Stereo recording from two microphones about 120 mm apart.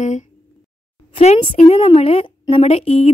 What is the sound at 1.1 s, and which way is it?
A woman's voice, 60° left (ahead or behind).